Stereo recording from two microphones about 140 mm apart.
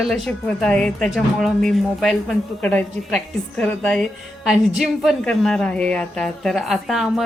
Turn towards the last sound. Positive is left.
turn(degrees=0)  # may be behind; listen again after turning